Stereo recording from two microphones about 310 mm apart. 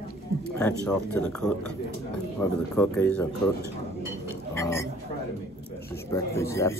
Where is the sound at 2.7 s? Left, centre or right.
Centre.